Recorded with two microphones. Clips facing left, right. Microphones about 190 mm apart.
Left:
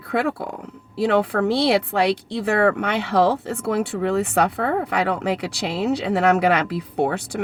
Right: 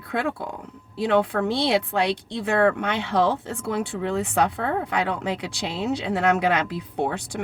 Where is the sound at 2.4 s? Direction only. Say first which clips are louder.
Left 1 dB; 65° left (ahead or behind).